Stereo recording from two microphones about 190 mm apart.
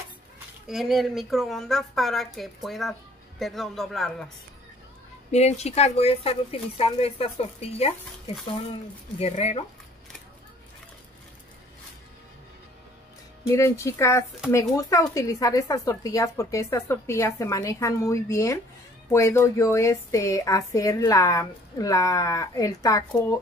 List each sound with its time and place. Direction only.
0.7 s a woman's voice: centre (ahead or behind)
5.3 s speech: 35° left (ahead or behind)
9.2 s speech: 35° left (ahead or behind)
13.5 s speech: 15° left (ahead or behind)